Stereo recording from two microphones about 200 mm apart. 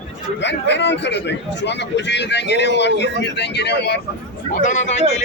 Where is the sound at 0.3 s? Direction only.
60° left (ahead or behind).